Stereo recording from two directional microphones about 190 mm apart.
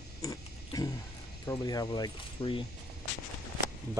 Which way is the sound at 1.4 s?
20° left (ahead or behind).